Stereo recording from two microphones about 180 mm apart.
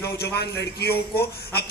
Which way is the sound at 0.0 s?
65° left (ahead or behind).